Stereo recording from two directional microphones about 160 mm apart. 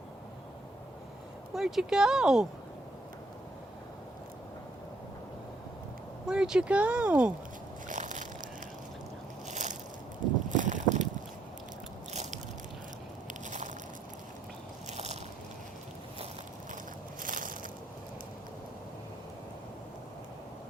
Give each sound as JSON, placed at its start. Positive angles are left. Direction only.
{"t": 1.5, "sound": "speech", "side_deg": 0}
{"t": 6.2, "sound": "speech", "side_deg": -5}
{"t": 7.9, "sound": "crushing", "side_deg": -50}
{"t": 9.5, "sound": "crushing", "side_deg": -50}
{"t": 10.5, "sound": "boat", "side_deg": -50}
{"t": 12.1, "sound": "biting", "side_deg": -45}
{"t": 14.8, "sound": "biting", "side_deg": -45}
{"t": 17.2, "sound": "crushing", "side_deg": -55}